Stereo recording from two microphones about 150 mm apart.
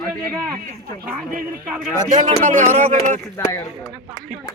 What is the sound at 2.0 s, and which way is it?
Speech, 50° right (ahead or behind).